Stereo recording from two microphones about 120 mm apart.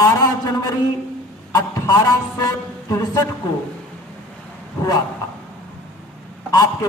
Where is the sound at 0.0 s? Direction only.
30° left (ahead or behind).